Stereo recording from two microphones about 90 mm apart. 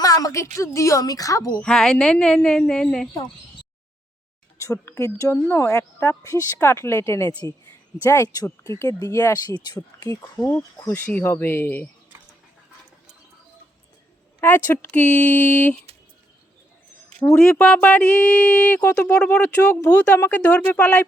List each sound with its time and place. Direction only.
0.0 s speech: 40° left (ahead or behind)
1.6 s speech: 5° left (ahead or behind)
4.6 s speech: 35° left (ahead or behind); by 10.1 s 50° left (ahead or behind)
10.3 s speech: 15° left (ahead or behind)
14.4 s speech: 25° left (ahead or behind)
17.3 s speech: 10° left (ahead or behind)